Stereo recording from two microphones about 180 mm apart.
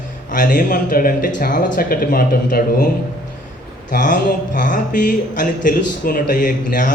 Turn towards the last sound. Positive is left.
turn(degrees=45)  # may be behind; listen again after turning